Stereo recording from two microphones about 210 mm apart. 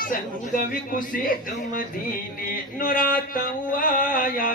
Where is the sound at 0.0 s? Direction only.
40° left (ahead or behind).